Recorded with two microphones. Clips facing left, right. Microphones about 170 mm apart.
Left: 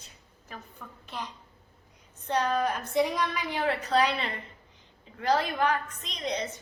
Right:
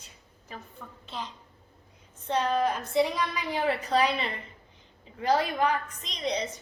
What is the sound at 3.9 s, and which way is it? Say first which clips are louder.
A woman's voice: left 1 dB; 5° right (ahead or behind).